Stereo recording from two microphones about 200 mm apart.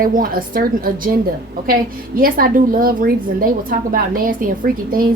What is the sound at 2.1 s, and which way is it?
A woman's voice, 45° right (ahead or behind).